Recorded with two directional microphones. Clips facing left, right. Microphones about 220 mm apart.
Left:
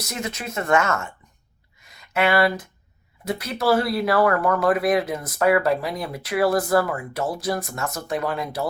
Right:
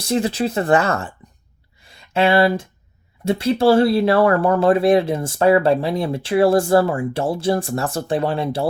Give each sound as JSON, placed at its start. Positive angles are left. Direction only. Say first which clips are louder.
{"t": 0.0, "sound": "speech", "louder": "right 11 dB", "side_deg": -30}
{"t": 1.8, "sound": "a sound", "louder": "right 4 dB", "side_deg": -30}
{"t": 3.2, "sound": "speech", "louder": "right 7 dB", "side_deg": -30}